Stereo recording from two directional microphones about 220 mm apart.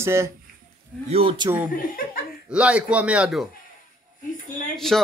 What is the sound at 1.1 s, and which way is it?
Speech, 25° right (ahead or behind).